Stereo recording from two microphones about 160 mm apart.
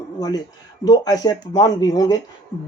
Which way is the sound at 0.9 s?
25° left (ahead or behind).